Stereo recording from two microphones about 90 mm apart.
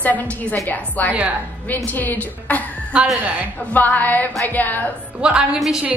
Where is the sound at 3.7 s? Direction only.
20° left (ahead or behind).